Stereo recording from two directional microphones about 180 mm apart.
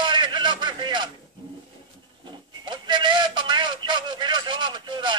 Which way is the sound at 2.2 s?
25° right (ahead or behind).